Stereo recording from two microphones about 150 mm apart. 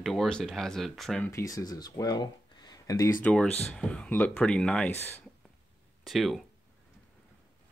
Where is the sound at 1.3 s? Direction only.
25° left (ahead or behind); by 4.9 s 10° left (ahead or behind).